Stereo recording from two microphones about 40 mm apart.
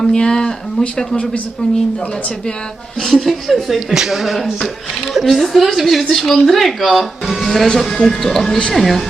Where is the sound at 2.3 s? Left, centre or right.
Centre.